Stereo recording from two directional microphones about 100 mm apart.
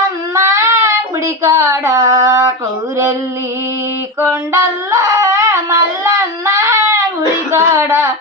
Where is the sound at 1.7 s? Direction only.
30° right (ahead or behind).